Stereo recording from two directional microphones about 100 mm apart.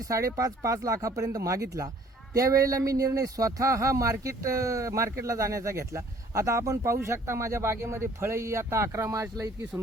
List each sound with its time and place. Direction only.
0.0 s speech: 35° right (ahead or behind)